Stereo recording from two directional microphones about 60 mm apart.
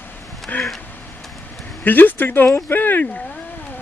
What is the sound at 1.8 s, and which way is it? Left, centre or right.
Speech, left.